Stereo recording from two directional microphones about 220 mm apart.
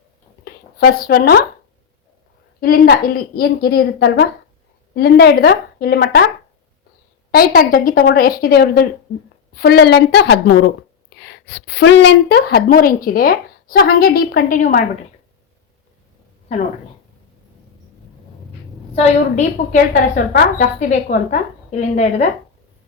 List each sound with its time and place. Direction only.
0.4 s a sound: 45° left (ahead or behind)
2.6 s a woman's voice: 40° left (ahead or behind)
7.3 s a woman's voice: 45° left (ahead or behind)
18.9 s speech: 30° left (ahead or behind)